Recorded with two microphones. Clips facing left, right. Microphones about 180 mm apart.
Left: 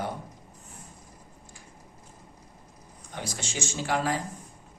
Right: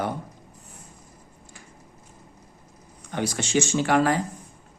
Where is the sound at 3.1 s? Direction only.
75° right (ahead or behind).